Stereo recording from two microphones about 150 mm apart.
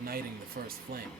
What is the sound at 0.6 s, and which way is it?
Speech, 85° right.